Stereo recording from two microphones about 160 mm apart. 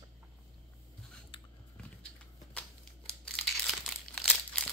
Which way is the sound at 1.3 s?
30° left (ahead or behind).